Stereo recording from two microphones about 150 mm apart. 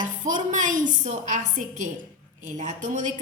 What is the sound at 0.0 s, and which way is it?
A woman's voice, 55° right (ahead or behind).